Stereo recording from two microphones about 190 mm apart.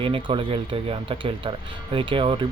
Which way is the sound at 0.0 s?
30° right (ahead or behind).